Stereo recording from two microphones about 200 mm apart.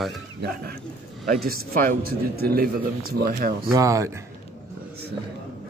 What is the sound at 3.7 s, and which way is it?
Speech, 15° right (ahead or behind).